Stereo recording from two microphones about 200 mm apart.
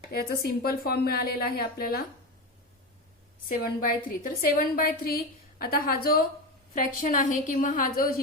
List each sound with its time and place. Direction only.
0.1 s a woman's voice: 50° left (ahead or behind)
3.5 s a woman's voice: 45° left (ahead or behind)